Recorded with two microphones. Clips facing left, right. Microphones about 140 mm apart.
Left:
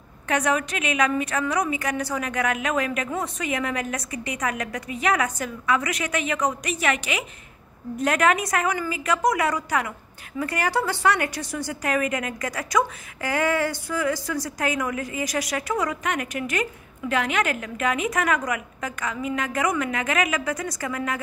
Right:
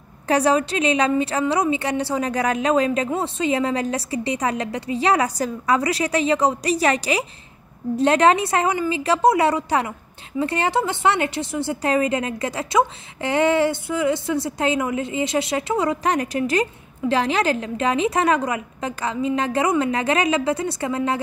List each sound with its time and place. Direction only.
0.3 s a woman's voice: 30° right (ahead or behind)